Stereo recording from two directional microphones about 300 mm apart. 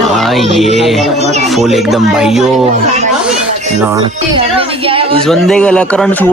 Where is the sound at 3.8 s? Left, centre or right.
Centre.